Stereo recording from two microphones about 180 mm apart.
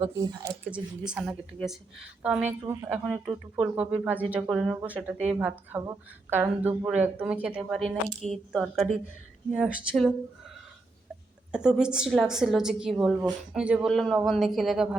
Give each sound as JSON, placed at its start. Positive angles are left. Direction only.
{"t": 0.0, "sound": "speech", "side_deg": -20}
{"t": 0.7, "sound": "a woman's voice", "side_deg": -5}
{"t": 11.5, "sound": "a woman's voice", "side_deg": -5}